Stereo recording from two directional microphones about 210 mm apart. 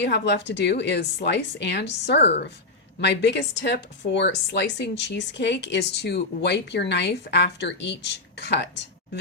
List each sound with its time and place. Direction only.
0.0 s a woman's voice: 55° left (ahead or behind)